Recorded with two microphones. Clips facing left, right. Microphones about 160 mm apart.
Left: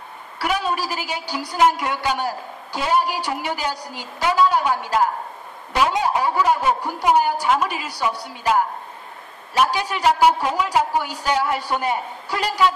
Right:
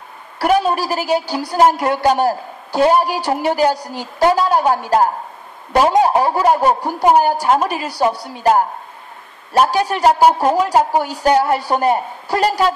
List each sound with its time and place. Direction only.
0.4 s a woman's voice: 45° right (ahead or behind)